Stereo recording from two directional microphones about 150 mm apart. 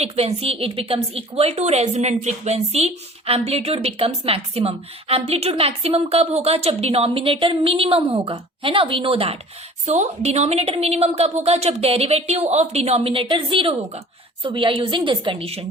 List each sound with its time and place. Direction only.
0.0 s a woman's voice: 45° right (ahead or behind)